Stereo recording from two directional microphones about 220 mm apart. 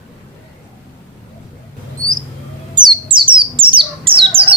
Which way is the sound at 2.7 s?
20° right (ahead or behind).